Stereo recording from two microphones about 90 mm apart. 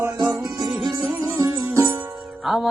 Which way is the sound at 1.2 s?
35° right (ahead or behind).